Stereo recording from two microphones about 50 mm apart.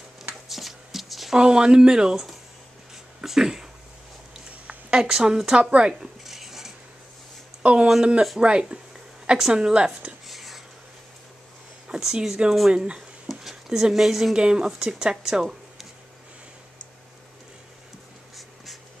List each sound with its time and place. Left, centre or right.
0.5 s shuffle: centre
1.3 s a woman's voice: centre
4.9 s a woman's voice: centre
6.2 s a sound: centre
7.6 s a woman's voice: right
10.2 s a sound: centre
11.9 s speech: centre
13.3 s a sound: centre
14.3 s a woman's voice: centre